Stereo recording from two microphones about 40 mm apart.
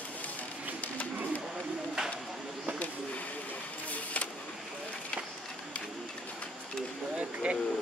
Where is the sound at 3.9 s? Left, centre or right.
Left.